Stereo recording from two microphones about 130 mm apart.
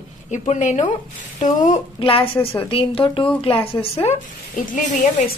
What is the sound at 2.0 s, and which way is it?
A woman's voice, 45° left (ahead or behind).